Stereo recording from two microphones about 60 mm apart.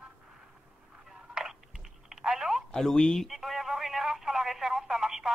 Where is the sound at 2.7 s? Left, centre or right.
Centre.